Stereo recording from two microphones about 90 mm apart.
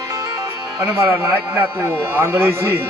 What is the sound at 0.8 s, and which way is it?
Speech, 25° right (ahead or behind).